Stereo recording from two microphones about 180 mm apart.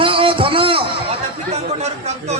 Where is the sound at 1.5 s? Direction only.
40° right (ahead or behind).